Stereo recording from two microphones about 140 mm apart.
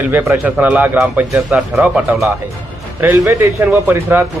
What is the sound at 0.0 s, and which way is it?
A man's voice, 15° right (ahead or behind).